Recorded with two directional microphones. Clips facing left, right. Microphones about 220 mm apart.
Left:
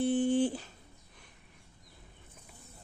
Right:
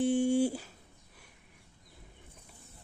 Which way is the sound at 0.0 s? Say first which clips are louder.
Right 1 dB; 10° right (ahead or behind).